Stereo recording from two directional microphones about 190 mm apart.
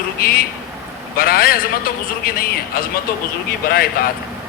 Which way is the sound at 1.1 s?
50° left (ahead or behind).